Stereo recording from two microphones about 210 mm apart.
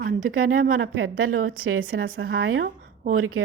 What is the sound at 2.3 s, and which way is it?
A woman's voice, 85° right.